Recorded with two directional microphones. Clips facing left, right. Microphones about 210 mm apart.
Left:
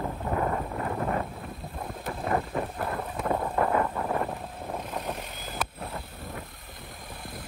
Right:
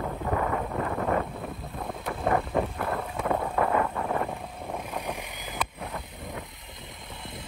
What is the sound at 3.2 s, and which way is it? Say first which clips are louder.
Wind: even; centre (ahead or behind).